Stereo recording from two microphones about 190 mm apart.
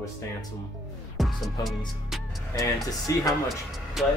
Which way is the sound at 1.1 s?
Centre (ahead or behind).